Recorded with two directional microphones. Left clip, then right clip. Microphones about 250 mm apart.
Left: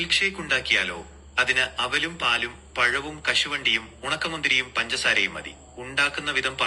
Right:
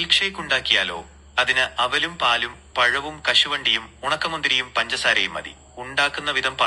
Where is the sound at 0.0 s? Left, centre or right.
Centre.